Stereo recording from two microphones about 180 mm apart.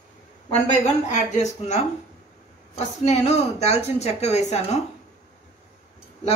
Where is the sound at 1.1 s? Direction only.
40° left (ahead or behind).